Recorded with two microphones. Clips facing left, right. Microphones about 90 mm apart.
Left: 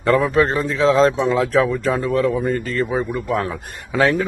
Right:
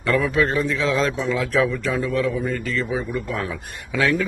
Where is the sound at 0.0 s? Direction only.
40° left (ahead or behind).